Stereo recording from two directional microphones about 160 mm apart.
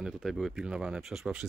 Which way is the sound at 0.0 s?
Centre (ahead or behind).